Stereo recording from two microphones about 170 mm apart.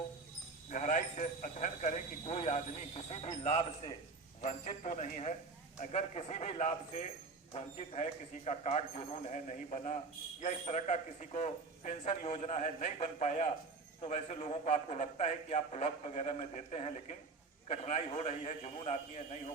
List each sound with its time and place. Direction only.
0.7 s a man's voice: 50° left (ahead or behind)